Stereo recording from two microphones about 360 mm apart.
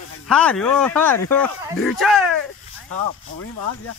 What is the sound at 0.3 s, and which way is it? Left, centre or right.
Speech, centre.